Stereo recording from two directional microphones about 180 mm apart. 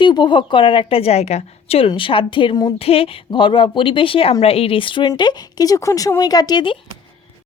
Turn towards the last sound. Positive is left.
turn(degrees=25)  # may be behind; listen again after turning